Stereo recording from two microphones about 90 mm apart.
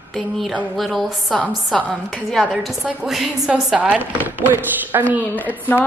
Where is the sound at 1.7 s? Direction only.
15° left (ahead or behind).